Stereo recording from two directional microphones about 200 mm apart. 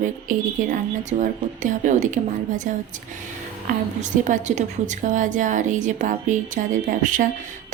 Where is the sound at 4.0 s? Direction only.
35° right (ahead or behind).